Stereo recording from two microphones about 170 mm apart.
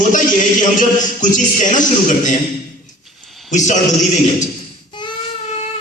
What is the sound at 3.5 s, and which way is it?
Speech, 45° left (ahead or behind).